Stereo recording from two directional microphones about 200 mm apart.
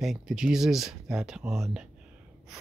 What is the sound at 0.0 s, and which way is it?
Speech, centre (ahead or behind).